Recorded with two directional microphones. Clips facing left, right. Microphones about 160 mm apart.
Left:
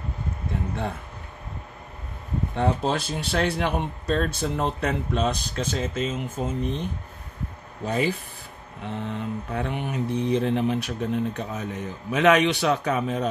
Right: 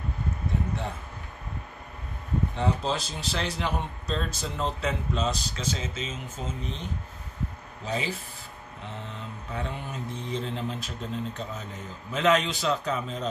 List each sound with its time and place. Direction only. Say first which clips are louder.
2.5 s a man's voice: left 6 dB; 55° left (ahead or behind)
7.8 s a man's voice: left 6 dB; 55° left (ahead or behind)